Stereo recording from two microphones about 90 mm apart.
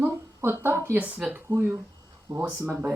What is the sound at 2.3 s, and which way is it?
Speech, 35° right (ahead or behind).